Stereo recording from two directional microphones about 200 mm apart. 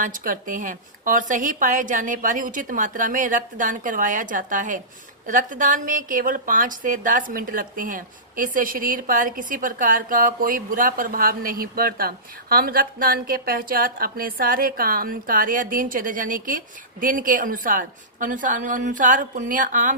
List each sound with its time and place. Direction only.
0.0 s speech: 40° right (ahead or behind)